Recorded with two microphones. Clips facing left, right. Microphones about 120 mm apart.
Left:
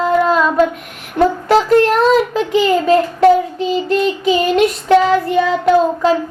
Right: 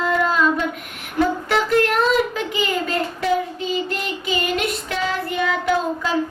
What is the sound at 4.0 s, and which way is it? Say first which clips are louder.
Child singing: left 10 dB; 35° left (ahead or behind).